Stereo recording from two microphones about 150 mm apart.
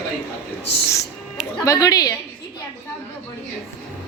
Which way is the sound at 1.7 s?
25° left (ahead or behind).